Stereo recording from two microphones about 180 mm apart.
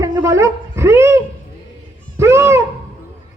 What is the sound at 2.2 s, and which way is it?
Speech, 15° right (ahead or behind).